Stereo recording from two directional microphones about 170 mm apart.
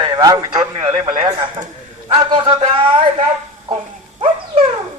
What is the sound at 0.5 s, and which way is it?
Speech, 40° right (ahead or behind).